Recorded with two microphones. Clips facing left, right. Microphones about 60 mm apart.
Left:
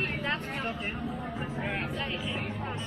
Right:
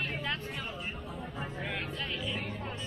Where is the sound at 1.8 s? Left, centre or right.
Left.